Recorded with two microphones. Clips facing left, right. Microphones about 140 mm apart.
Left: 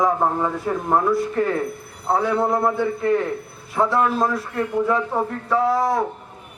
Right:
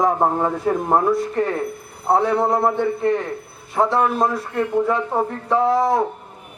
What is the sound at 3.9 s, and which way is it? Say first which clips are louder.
Speech: right 1 dB; 25° right (ahead or behind).